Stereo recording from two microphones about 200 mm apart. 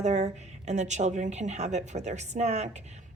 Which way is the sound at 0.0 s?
35° right (ahead or behind).